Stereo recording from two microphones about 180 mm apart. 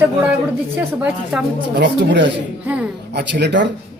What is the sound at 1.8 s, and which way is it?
A man's voice, 75° right (ahead or behind).